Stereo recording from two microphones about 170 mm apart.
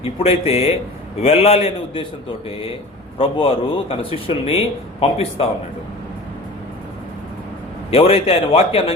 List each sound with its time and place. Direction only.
0.0 s speech: 35° left (ahead or behind)
3.2 s speech: 35° left (ahead or behind)
7.9 s speech: 35° left (ahead or behind)